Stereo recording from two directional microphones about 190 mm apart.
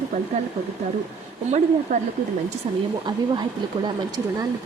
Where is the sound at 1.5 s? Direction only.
40° right (ahead or behind).